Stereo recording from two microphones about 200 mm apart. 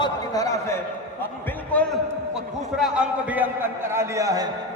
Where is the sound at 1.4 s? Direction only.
5° left (ahead or behind).